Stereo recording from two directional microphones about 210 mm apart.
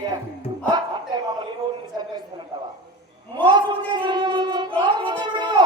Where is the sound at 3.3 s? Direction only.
20° right (ahead or behind).